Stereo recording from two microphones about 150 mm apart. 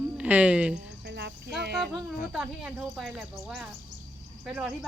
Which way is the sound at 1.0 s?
90° right.